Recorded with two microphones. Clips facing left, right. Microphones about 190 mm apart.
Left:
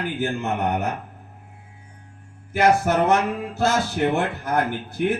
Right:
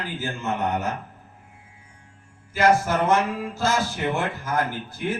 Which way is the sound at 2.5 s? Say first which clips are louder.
Left 1 dB; 60° left (ahead or behind).